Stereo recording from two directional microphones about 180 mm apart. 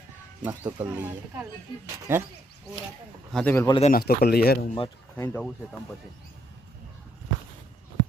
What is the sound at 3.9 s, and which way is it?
Speech, 60° left (ahead or behind).